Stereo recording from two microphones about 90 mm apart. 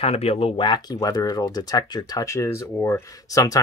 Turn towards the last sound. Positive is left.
turn(degrees=40)  # may be behind; listen again after turning